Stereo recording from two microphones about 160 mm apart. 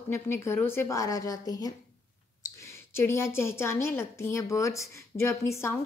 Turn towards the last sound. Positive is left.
turn(degrees=15)  # may be behind; listen again after turning